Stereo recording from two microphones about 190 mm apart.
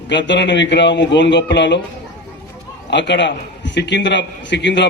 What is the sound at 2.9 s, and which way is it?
A man's voice, 65° left (ahead or behind).